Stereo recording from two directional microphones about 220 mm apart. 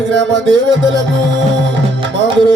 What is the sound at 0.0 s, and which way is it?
Music, 55° right (ahead or behind).